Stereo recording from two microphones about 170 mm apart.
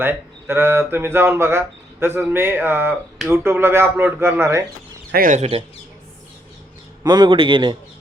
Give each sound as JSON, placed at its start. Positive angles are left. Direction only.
{"t": 0.0, "sound": "speech", "side_deg": -10}
{"t": 5.1, "sound": "speech", "side_deg": -50}
{"t": 7.0, "sound": "a man's voice", "side_deg": -25}